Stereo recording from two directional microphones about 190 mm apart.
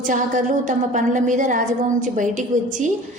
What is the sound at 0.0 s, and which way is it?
A woman's voice, 40° right (ahead or behind).